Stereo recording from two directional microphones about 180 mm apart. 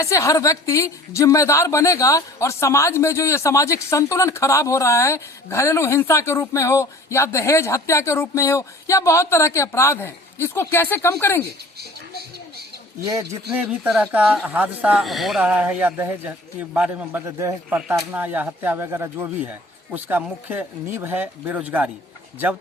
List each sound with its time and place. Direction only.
0.0 s a woman's voice: 15° left (ahead or behind)
13.6 s speech: 5° right (ahead or behind)